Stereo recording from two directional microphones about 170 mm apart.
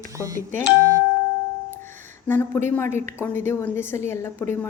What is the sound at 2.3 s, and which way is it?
A woman's voice, 15° left (ahead or behind).